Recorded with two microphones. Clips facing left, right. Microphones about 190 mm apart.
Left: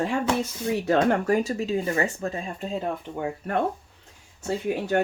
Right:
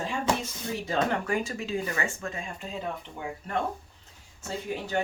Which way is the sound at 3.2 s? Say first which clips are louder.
Left 6 dB; 55° left (ahead or behind).